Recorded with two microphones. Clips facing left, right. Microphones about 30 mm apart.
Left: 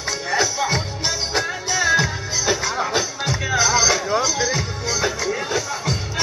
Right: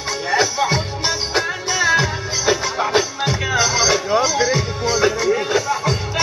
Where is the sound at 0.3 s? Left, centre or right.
Centre.